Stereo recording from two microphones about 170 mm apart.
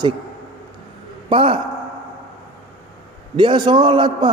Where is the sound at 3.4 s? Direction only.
25° right (ahead or behind).